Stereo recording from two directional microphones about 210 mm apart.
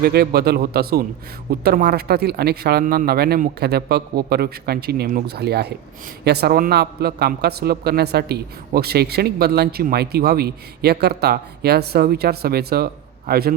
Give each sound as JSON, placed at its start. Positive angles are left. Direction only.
{"t": 0.0, "sound": "a man's voice", "side_deg": -50}